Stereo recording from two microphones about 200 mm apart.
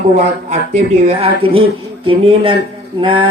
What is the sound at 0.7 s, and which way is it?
Speech, 30° right (ahead or behind).